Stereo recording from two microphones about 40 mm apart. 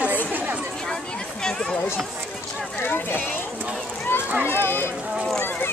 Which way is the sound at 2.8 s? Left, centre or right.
Left.